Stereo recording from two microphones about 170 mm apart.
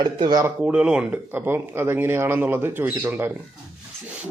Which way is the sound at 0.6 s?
5° right (ahead or behind).